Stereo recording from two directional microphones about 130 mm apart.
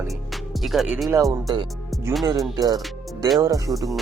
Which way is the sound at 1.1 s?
25° right (ahead or behind).